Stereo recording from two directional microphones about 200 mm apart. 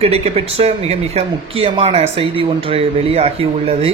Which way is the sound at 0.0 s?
30° right (ahead or behind).